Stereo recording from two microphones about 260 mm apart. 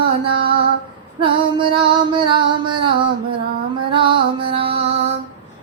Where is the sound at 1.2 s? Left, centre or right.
Centre.